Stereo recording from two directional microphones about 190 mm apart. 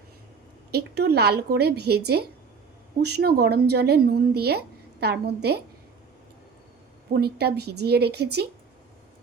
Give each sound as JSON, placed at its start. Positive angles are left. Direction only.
{"t": 0.7, "sound": "speech", "side_deg": -60}
{"t": 7.1, "sound": "speech", "side_deg": -55}